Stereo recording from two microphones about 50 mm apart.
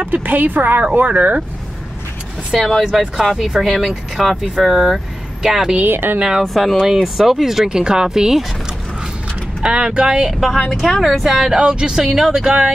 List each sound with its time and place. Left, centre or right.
0.0 s speech: right
2.5 s speech: centre
5.9 s speech: right
6.4 s speech: centre
9.6 s speech: right
10.7 s speech: centre
11.5 s speech: centre